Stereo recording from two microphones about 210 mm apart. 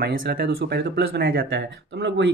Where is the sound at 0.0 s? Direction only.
50° right (ahead or behind).